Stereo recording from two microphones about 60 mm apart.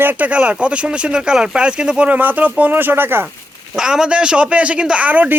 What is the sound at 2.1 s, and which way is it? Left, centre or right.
Speech, right.